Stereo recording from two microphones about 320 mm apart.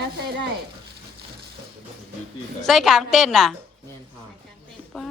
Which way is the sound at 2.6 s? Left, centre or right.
Centre.